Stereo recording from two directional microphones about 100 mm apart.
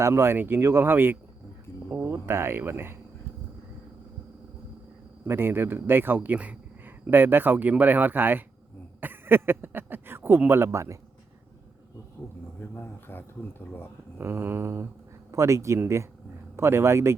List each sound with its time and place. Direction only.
0.0 s speech: 25° right (ahead or behind)
5.2 s speech: 20° right (ahead or behind)
12.5 s a sound: 20° left (ahead or behind)
14.2 s speech: 25° right (ahead or behind)